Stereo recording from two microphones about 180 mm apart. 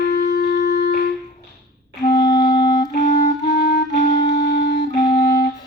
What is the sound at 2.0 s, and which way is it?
Music, 20° left (ahead or behind).